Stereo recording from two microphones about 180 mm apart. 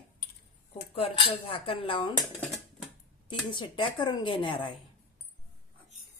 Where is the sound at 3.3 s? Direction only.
30° left (ahead or behind).